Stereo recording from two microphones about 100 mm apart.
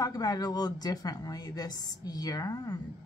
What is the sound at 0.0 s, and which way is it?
A woman's voice, 40° left (ahead or behind).